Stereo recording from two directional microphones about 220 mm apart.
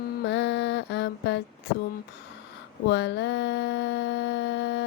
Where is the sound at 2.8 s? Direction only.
50° left (ahead or behind).